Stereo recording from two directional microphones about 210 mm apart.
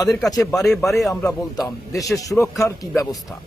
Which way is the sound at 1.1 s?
15° left (ahead or behind).